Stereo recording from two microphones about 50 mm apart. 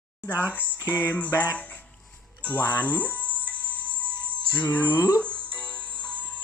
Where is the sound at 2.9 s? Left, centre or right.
Left.